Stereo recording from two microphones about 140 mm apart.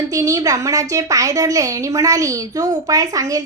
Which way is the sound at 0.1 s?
25° right (ahead or behind).